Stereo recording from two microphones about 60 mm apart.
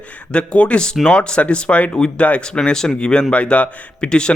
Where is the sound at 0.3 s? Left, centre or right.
Centre.